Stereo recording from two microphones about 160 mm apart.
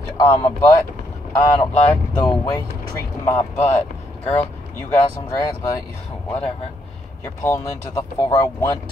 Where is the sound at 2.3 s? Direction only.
25° left (ahead or behind).